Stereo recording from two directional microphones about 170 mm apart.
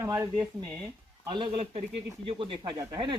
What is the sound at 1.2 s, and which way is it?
Speech, 30° right (ahead or behind).